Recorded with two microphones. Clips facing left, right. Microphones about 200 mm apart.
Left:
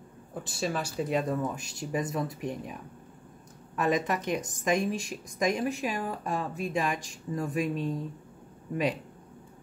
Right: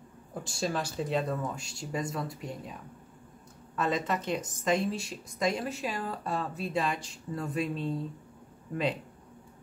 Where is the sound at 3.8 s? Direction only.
15° left (ahead or behind).